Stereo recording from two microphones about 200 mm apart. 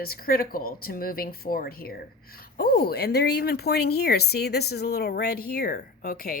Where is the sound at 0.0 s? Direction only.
50° left (ahead or behind).